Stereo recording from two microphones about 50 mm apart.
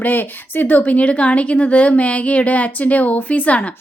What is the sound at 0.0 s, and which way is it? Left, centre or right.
A woman's voice, left.